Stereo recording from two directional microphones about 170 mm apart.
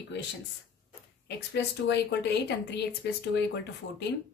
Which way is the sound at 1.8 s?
85° left.